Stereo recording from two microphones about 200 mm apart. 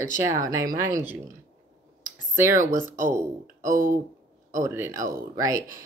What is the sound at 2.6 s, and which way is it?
Speech, 40° right (ahead or behind).